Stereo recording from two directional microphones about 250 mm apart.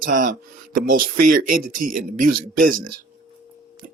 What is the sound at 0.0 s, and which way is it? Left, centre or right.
Speech, right.